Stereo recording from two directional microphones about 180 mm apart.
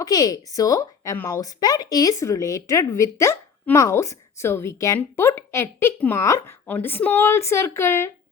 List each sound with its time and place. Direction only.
0.0 s speech: 20° left (ahead or behind)